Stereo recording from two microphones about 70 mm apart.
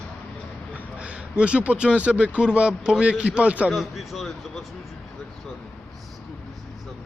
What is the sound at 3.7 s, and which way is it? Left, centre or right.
Speech, centre.